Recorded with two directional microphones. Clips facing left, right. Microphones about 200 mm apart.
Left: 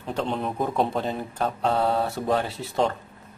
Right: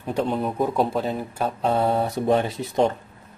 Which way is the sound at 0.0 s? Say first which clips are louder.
Right 3 dB; 10° right (ahead or behind).